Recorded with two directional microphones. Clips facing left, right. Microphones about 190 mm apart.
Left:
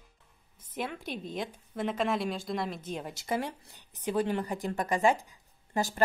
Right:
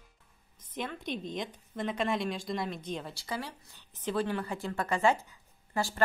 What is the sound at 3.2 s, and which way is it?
A woman's voice, 20° left (ahead or behind).